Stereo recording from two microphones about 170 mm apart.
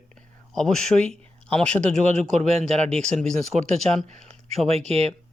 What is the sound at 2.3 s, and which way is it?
Speech, 40° right (ahead or behind).